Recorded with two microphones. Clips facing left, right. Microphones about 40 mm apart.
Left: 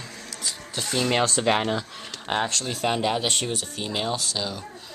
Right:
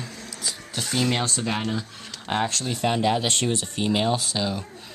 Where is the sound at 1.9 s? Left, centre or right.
Centre.